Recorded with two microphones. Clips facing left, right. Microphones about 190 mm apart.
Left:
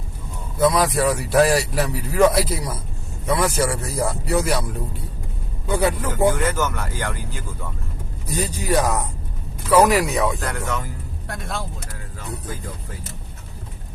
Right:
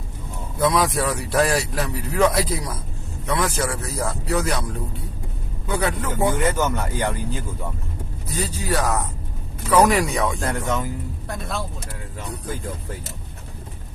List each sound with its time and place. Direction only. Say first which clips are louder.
0.6 s speech: left 2 dB; centre (ahead or behind)
5.6 s speech: left 3 dB; 10° left (ahead or behind)
6.3 s speech: right 1 dB; 20° right (ahead or behind)
8.3 s speech: left 3 dB; 15° left (ahead or behind)
10.4 s speech: right 2 dB; 20° right (ahead or behind)
11.3 s speech: even; centre (ahead or behind)